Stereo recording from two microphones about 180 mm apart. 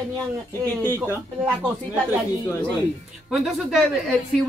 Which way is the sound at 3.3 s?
Centre (ahead or behind).